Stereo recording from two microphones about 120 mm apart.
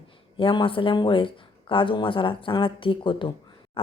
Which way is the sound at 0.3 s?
45° left (ahead or behind).